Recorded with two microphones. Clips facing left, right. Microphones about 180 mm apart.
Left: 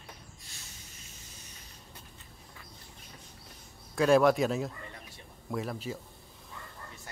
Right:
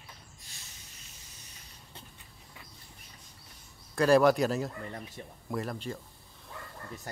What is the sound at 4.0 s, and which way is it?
Speech, centre (ahead or behind).